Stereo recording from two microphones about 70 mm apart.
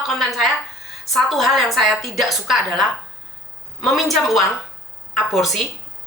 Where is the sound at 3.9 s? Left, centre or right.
Centre.